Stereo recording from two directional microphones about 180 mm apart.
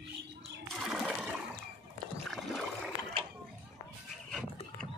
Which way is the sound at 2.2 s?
Centre (ahead or behind).